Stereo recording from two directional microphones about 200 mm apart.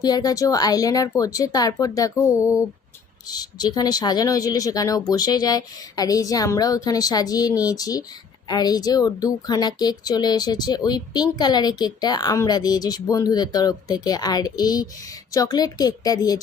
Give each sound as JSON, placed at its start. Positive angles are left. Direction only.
{"t": 0.0, "sound": "speech", "side_deg": 20}
{"t": 3.2, "sound": "speech", "side_deg": 20}